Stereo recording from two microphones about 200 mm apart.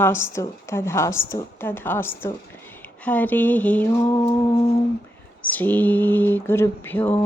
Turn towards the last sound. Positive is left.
turn(degrees=10)  # may be behind; listen again after turning